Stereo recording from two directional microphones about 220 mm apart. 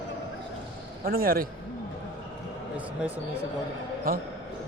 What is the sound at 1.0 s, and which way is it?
Speech, 40° right (ahead or behind).